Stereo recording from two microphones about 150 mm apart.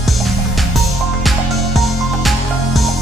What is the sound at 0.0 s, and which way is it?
Music, centre (ahead or behind).